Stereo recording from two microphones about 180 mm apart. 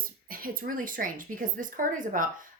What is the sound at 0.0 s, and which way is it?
Speech, 50° right (ahead or behind).